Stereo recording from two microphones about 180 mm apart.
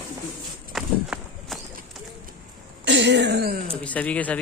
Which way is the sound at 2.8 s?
80° right.